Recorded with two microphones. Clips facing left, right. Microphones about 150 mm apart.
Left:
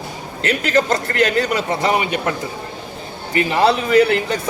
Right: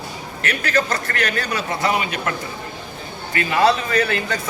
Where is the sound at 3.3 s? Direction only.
25° left (ahead or behind).